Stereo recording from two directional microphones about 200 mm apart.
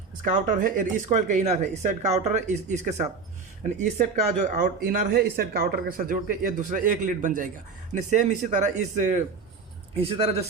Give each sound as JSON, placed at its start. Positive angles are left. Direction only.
{"t": 0.6, "sound": "a man's voice", "side_deg": -40}